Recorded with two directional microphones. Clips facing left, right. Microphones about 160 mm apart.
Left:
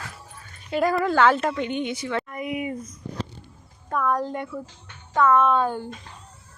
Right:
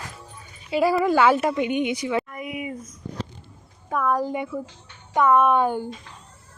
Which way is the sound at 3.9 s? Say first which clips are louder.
Right 1 dB; 5° right (ahead or behind).